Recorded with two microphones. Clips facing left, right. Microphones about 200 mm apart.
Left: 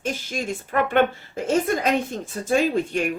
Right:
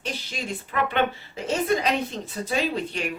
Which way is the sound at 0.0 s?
45° left (ahead or behind).